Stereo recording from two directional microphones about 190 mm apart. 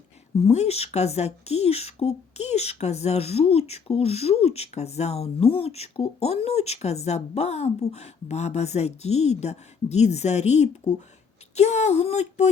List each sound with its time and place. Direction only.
0.4 s speech: 35° left (ahead or behind)